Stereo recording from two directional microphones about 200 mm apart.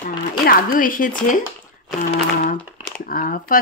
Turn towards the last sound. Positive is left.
turn(degrees=45)  # may be behind; listen again after turning